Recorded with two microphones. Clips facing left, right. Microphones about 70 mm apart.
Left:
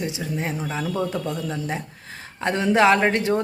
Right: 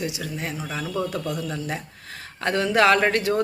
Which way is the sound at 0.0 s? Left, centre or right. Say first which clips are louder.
Left 2 dB; left.